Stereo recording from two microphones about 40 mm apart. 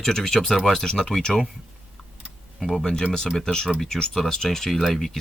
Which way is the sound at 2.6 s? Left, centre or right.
Centre.